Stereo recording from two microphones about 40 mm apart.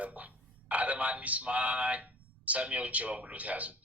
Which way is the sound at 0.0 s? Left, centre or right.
Right.